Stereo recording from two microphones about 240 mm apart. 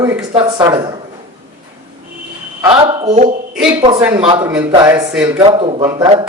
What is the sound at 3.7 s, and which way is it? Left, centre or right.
Speech, centre.